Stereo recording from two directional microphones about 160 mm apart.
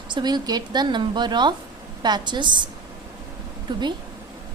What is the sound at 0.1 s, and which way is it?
A woman's voice, 25° right (ahead or behind).